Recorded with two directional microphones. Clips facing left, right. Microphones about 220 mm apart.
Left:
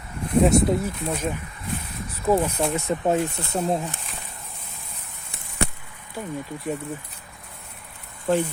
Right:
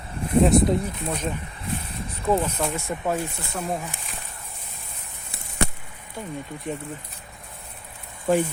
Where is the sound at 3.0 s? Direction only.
25° left (ahead or behind).